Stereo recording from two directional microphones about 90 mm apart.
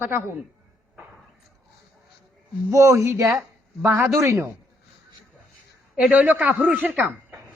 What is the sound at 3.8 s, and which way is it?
Speech, 25° right (ahead or behind).